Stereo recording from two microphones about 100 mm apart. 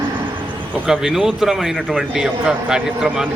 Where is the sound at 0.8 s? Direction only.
5° right (ahead or behind).